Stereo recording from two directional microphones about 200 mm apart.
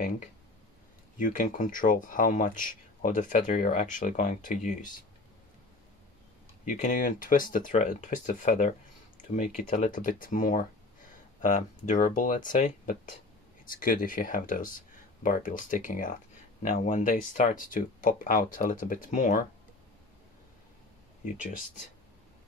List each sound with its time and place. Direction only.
1.1 s speech: 40° left (ahead or behind)
6.6 s speech: 40° left (ahead or behind)